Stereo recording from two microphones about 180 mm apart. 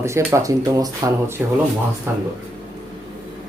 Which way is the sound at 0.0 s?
15° right (ahead or behind).